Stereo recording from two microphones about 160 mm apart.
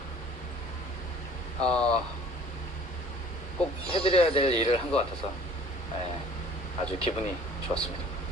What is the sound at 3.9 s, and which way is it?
Speech, 35° left (ahead or behind).